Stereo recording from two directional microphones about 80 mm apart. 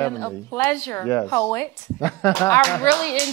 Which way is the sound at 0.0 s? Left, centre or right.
Left.